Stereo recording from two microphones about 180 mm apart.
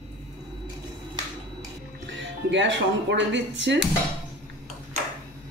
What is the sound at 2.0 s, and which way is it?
Speech, 90° right.